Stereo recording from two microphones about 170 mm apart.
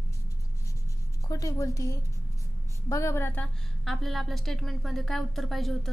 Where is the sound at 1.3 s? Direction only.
20° left (ahead or behind).